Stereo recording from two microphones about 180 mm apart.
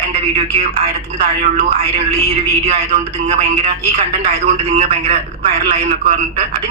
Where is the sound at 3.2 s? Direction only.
35° right (ahead or behind).